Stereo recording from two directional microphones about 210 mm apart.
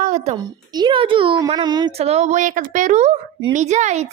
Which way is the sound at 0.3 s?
20° right (ahead or behind).